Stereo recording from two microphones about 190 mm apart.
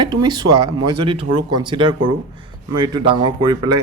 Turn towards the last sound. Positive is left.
turn(degrees=-20)  # may be behind; listen again after turning